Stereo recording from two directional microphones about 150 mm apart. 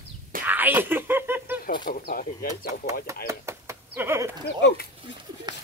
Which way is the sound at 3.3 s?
20° right (ahead or behind).